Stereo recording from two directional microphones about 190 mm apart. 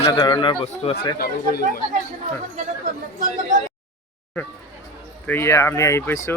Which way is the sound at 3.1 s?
45° right (ahead or behind).